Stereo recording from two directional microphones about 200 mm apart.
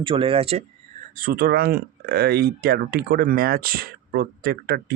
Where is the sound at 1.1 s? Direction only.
45° right (ahead or behind).